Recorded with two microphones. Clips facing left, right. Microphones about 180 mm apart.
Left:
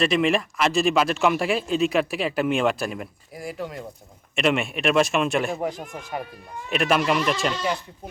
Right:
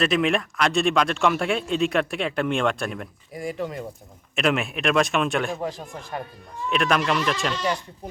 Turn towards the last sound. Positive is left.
turn(degrees=5)  # may be behind; listen again after turning